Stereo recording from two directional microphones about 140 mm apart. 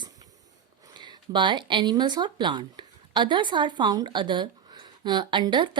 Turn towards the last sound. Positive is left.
turn(degrees=-35)  # may be behind; listen again after turning